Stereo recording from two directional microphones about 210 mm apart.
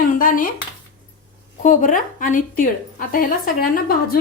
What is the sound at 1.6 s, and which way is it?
A woman's voice, 40° left (ahead or behind).